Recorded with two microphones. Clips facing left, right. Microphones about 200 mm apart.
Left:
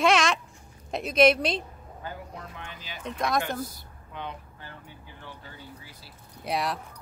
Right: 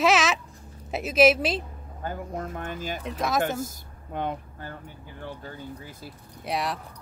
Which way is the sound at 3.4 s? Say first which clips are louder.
Right 4 dB; 45° right (ahead or behind).